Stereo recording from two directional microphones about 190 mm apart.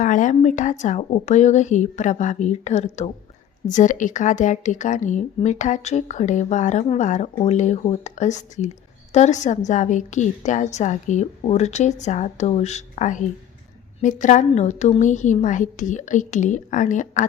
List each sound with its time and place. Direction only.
0.0 s a woman's voice: 40° left (ahead or behind)